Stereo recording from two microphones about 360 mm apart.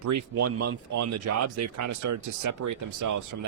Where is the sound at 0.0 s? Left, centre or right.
Right.